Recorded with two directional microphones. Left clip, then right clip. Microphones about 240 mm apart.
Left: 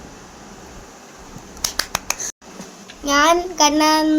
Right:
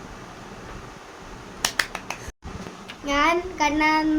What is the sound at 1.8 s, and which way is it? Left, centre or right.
Finger snapping, left.